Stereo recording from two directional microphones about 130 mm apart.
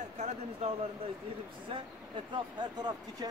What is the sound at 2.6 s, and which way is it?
Speech, 35° right (ahead or behind).